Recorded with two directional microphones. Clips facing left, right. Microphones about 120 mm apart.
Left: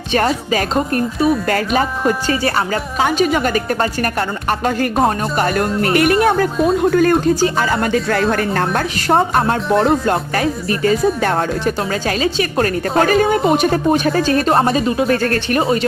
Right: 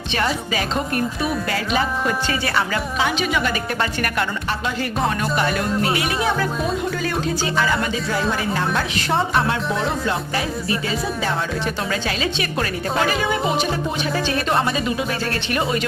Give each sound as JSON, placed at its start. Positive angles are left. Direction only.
{"t": 0.5, "sound": "speech", "side_deg": 40}
{"t": 6.3, "sound": "speech", "side_deg": 45}
{"t": 11.8, "sound": "speech", "side_deg": 40}
{"t": 15.6, "sound": "speech", "side_deg": 35}